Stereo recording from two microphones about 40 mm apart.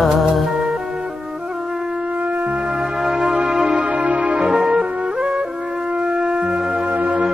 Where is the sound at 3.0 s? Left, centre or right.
Centre.